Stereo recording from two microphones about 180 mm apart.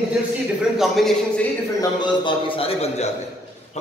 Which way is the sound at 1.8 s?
25° left (ahead or behind).